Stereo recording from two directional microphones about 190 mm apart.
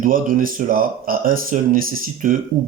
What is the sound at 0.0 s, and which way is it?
Speech, 45° right (ahead or behind).